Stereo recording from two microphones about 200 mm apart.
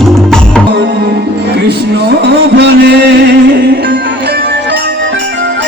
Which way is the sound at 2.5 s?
60° right (ahead or behind).